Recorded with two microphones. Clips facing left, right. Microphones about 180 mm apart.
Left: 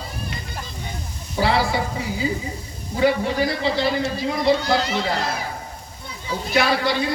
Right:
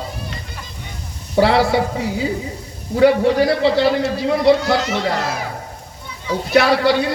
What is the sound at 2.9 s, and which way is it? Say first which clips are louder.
A man's voice: right 7 dB; 65° right (ahead or behind).